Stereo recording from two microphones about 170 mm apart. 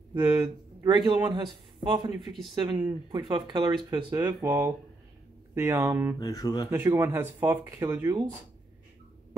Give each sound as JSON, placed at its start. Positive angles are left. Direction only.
{"t": 0.1, "sound": "speech", "side_deg": -10}
{"t": 0.8, "sound": "a man's voice", "side_deg": -25}
{"t": 6.1, "sound": "speech", "side_deg": 20}
{"t": 6.7, "sound": "speech", "side_deg": -15}